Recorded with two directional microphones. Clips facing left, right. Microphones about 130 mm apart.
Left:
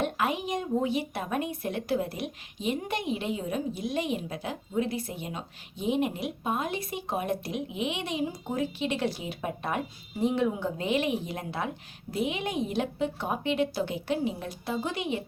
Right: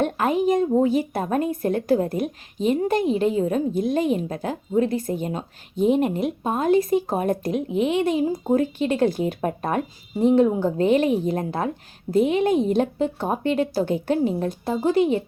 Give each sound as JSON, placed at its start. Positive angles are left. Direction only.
{"t": 0.0, "sound": "speech", "side_deg": -45}